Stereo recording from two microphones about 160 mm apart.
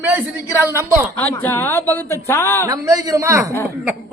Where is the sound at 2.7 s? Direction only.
20° right (ahead or behind).